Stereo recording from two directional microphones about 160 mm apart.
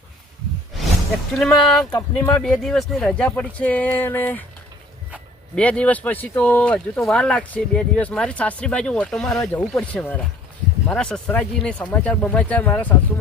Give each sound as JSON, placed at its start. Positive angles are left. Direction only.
{"t": 1.3, "sound": "speech", "side_deg": 5}
{"t": 1.9, "sound": "speech", "side_deg": 20}
{"t": 2.4, "sound": "speech", "side_deg": 5}
{"t": 5.5, "sound": "speech", "side_deg": 5}